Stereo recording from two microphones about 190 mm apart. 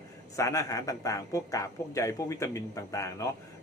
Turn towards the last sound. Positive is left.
turn(degrees=15)  # may be behind; listen again after turning